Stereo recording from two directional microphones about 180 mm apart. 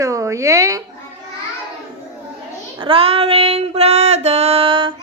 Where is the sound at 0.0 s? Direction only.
20° right (ahead or behind).